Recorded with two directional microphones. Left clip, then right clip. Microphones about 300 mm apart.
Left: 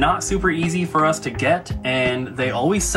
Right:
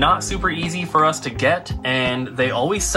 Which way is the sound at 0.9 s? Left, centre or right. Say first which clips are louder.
Right 2 dB; right.